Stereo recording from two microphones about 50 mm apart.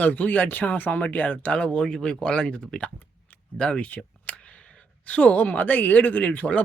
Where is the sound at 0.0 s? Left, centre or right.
Left.